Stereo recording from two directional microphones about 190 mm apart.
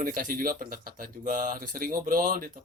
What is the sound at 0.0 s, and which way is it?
Speech, 45° right (ahead or behind).